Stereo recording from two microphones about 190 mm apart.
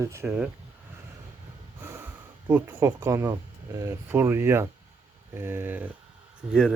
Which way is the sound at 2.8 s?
15° right (ahead or behind).